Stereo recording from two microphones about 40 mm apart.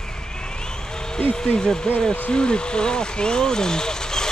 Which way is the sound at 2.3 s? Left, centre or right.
Left.